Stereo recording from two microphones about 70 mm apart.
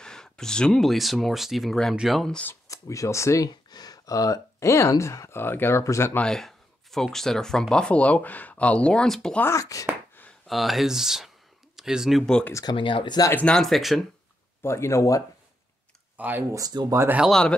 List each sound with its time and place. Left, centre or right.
0.0 s speech: centre
2.7 s speech: left
3.7 s speech: left
6.2 s speech: centre
9.5 s speech: left
10.4 s speech: centre
12.6 s speech: left
13.5 s speech: centre
14.6 s speech: left
16.2 s speech: right
16.5 s speech: right
17.3 s speech: centre